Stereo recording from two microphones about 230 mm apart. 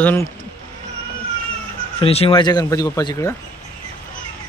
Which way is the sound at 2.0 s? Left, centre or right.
Left.